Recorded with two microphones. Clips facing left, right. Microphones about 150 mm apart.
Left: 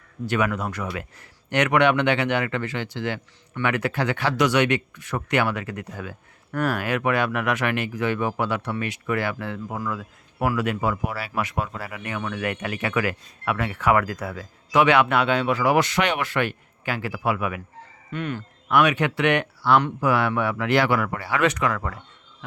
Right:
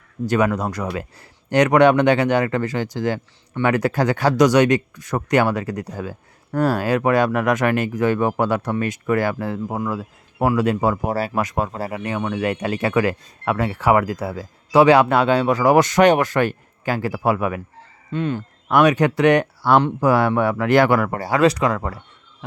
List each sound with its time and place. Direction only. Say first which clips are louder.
0.3 s speech: right 5 dB; 40° right (ahead or behind)
9.6 s speech: right 5 dB; 25° right (ahead or behind)
18.7 s speech: right 5 dB; 40° right (ahead or behind)